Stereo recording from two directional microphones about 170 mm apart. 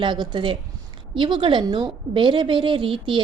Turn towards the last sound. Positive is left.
turn(degrees=-30)  # may be behind; listen again after turning